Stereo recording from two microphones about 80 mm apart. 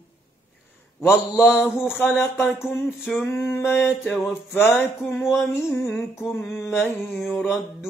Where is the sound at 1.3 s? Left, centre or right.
Centre.